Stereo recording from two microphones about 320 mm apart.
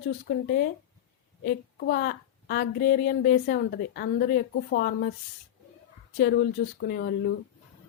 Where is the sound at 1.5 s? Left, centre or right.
Left.